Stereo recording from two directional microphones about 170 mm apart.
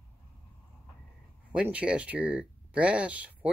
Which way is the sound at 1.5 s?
5° right (ahead or behind).